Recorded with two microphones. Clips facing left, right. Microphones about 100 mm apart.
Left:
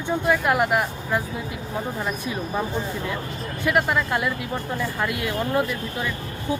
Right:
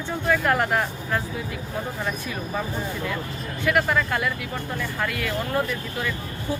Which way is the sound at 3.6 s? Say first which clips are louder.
Even; 20° left (ahead or behind).